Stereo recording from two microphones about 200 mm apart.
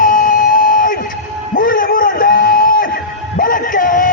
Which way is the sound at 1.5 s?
45° left (ahead or behind).